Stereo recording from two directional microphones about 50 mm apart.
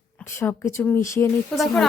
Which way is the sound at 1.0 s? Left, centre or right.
Left.